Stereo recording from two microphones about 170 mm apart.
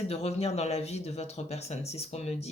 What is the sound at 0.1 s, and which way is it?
Speech, 35° left (ahead or behind).